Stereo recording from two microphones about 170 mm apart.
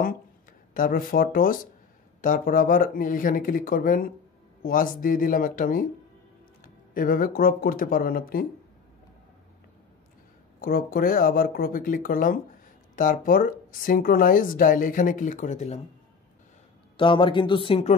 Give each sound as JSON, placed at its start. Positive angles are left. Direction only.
{"t": 0.7, "sound": "speech", "side_deg": 55}
{"t": 10.6, "sound": "speech", "side_deg": 60}
{"t": 16.9, "sound": "speech", "side_deg": 30}